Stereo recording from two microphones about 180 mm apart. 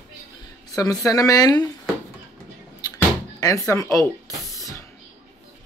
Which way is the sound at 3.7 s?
15° left (ahead or behind).